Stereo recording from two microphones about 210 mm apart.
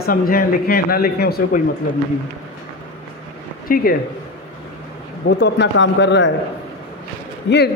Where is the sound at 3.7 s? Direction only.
45° left (ahead or behind).